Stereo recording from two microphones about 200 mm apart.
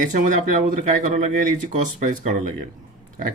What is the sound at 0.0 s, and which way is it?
Speech, 40° right (ahead or behind).